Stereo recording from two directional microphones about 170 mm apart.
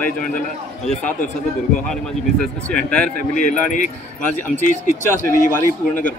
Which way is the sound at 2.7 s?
5° left (ahead or behind).